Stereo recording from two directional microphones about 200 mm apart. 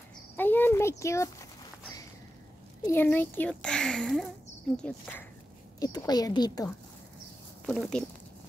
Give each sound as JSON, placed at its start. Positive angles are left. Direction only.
{"t": 0.4, "sound": "a child's voice", "side_deg": 10}
{"t": 2.8, "sound": "a child's voice", "side_deg": 10}
{"t": 5.8, "sound": "a woman's voice", "side_deg": 20}
{"t": 7.6, "sound": "a child's voice", "side_deg": 5}